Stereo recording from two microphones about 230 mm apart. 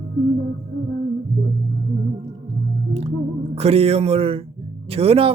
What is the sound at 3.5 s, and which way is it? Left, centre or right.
Speech, right.